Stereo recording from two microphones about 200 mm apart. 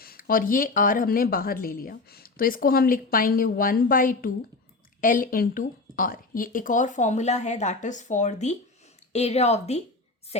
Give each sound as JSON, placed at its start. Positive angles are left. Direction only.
{"t": 0.0, "sound": "a woman's voice", "side_deg": 45}